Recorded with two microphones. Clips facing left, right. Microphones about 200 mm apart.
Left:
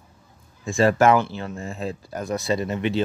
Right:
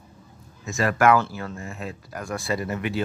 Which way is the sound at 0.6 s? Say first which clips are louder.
Left 3 dB; 30° left (ahead or behind).